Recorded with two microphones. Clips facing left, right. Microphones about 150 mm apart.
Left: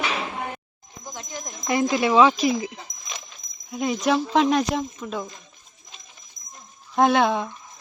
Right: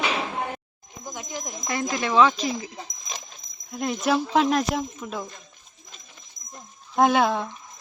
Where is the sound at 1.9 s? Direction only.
15° left (ahead or behind).